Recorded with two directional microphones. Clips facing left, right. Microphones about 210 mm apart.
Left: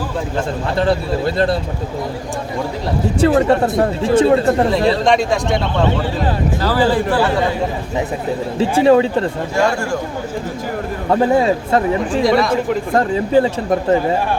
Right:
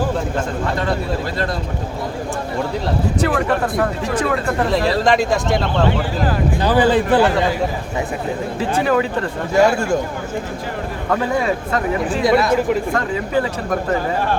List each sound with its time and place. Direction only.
0.8 s speech: 30° left (ahead or behind)
3.2 s speech: 25° left (ahead or behind)
4.9 s speech: centre (ahead or behind)
6.6 s a man's voice: 20° right (ahead or behind)
8.8 s speech: 25° left (ahead or behind)
11.1 s speech: 30° left (ahead or behind)
12.2 s speech: centre (ahead or behind)
12.9 s speech: 30° left (ahead or behind)